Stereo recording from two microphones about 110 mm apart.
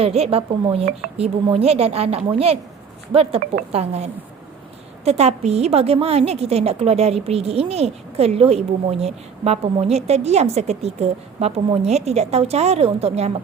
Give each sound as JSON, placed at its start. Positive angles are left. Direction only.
{"t": 0.0, "sound": "a woman's voice", "side_deg": -65}